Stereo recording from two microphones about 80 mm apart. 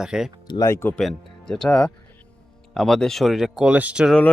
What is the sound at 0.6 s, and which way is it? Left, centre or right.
Speech, left.